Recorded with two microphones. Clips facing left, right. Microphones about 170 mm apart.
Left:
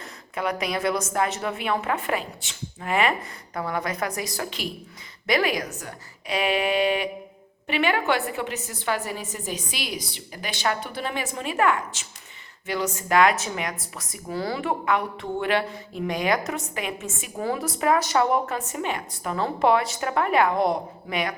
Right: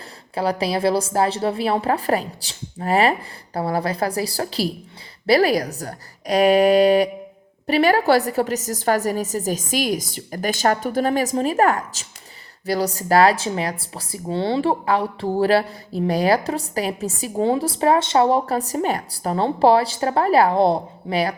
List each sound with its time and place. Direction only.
0.3 s speech: 30° right (ahead or behind)